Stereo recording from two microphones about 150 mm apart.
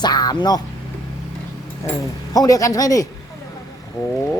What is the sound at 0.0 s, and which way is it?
Speech, 25° left (ahead or behind).